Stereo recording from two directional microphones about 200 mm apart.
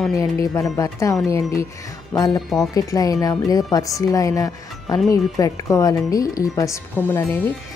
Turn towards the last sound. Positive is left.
turn(degrees=15)  # may be behind; listen again after turning